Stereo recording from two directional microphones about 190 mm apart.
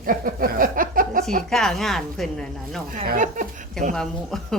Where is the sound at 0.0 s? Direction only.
50° right (ahead or behind).